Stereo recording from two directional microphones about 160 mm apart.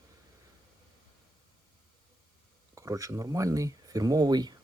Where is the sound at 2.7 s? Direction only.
20° right (ahead or behind).